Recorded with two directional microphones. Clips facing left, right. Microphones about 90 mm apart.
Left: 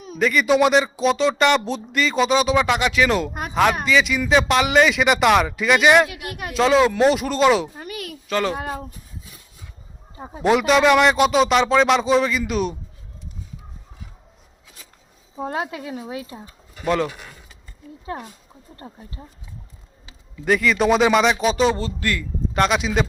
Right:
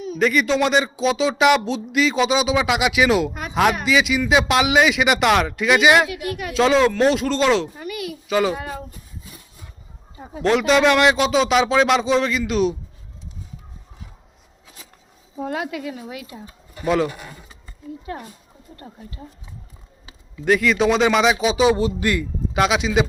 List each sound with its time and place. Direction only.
0.2 s speech: centre (ahead or behind)
6.1 s speech: 40° left (ahead or behind)
6.5 s speech: centre (ahead or behind)
7.8 s a sound: 45° left (ahead or behind)
8.3 s speech: 5° right (ahead or behind)
8.5 s speech: 45° left (ahead or behind)
10.4 s speech: 5° left (ahead or behind)
15.4 s speech: 30° left (ahead or behind)
16.8 s speech: centre (ahead or behind)
18.1 s speech: 30° left (ahead or behind)
20.4 s speech: centre (ahead or behind); by 22.3 s 20° right (ahead or behind)
22.5 s speech: 5° right (ahead or behind)